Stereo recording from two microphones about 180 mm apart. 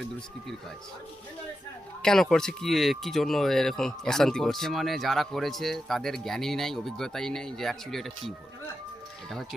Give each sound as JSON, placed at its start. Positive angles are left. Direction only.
{"t": 2.0, "sound": "speech", "side_deg": 5}
{"t": 9.3, "sound": "speech", "side_deg": 0}